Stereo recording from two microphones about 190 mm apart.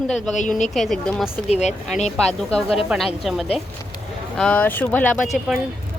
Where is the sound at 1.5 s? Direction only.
35° left (ahead or behind).